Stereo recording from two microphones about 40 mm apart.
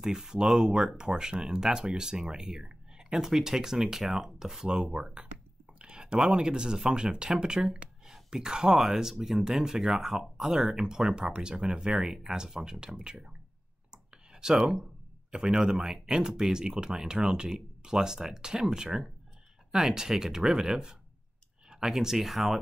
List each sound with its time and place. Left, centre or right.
0.0 s speech: centre
12.8 s speech: centre
14.3 s speech: centre